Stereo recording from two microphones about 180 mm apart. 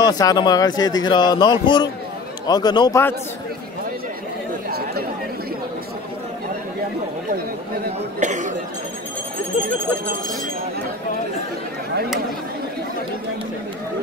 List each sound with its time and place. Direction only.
0.0 s speech: 20° left (ahead or behind)
4.6 s chatter: 60° right (ahead or behind)
8.2 s cough: 40° right (ahead or behind)